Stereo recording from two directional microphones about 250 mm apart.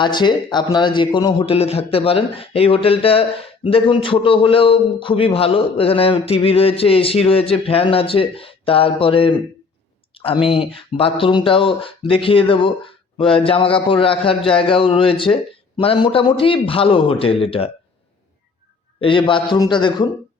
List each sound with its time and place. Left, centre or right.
0.0 s speech: centre
10.4 s speech: left
18.9 s speech: centre